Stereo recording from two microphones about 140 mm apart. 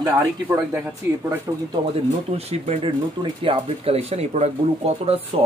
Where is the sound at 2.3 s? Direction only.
45° right (ahead or behind).